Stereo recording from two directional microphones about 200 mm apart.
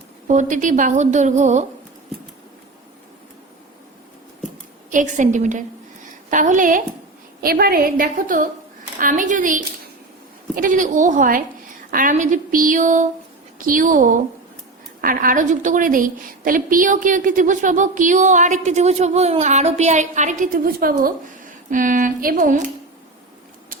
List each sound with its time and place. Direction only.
0.3 s a woman's voice: 40° right (ahead or behind)
4.9 s a woman's voice: 40° right (ahead or behind)